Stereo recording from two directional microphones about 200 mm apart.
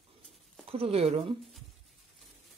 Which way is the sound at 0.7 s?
30° right (ahead or behind).